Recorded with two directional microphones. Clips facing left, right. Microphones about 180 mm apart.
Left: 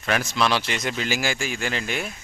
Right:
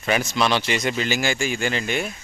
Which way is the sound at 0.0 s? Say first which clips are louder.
Right 2 dB; centre (ahead or behind).